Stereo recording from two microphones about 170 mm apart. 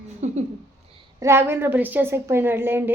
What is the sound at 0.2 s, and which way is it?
Speech, 40° right (ahead or behind).